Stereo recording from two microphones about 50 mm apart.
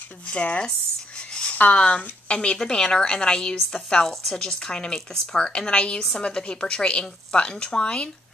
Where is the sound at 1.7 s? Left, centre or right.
Left.